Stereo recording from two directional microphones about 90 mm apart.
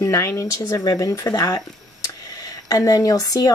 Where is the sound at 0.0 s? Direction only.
30° left (ahead or behind).